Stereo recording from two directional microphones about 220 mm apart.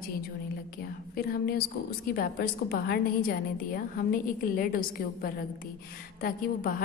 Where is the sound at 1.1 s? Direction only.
45° left (ahead or behind).